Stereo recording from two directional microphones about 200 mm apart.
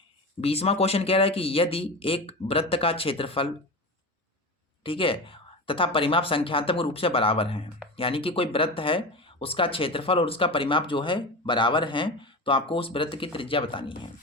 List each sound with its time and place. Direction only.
0.4 s speech: 30° left (ahead or behind)
4.8 s speech: 25° left (ahead or behind)